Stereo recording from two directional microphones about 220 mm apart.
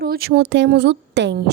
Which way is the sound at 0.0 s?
45° right (ahead or behind).